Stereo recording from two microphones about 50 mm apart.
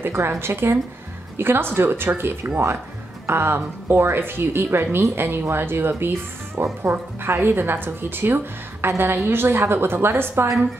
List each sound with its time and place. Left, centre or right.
0.0 s a woman's voice: right